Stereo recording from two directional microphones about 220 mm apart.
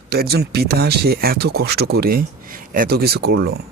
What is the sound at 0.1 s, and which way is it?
Speech, 45° right (ahead or behind).